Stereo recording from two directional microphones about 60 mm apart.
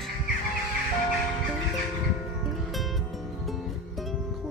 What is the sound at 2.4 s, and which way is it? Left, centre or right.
Music, centre.